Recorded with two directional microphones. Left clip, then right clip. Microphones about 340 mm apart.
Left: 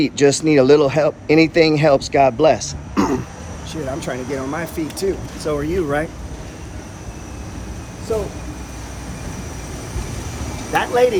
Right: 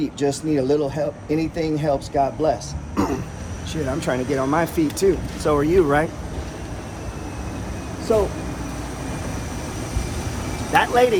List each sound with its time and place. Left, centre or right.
0.0 s speech: centre
1.9 s speech: left
4.0 s speech: centre
8.1 s speech: centre
10.7 s speech: centre